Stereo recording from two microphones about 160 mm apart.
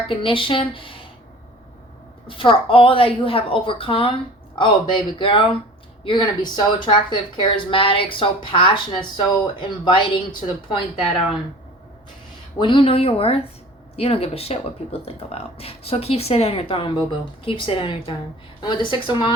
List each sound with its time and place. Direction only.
0.1 s speech: 35° left (ahead or behind)
2.2 s speech: 35° left (ahead or behind)
12.5 s speech: 30° left (ahead or behind)